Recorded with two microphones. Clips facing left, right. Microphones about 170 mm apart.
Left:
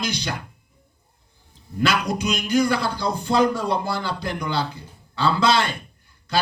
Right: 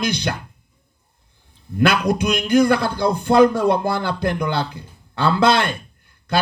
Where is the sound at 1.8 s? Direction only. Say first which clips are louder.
Right 5 dB; 55° right (ahead or behind).